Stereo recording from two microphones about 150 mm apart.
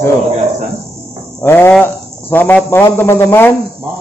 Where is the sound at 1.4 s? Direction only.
15° left (ahead or behind).